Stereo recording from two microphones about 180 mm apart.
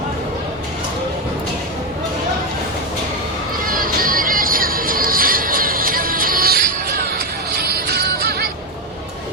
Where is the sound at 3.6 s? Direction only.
50° right (ahead or behind).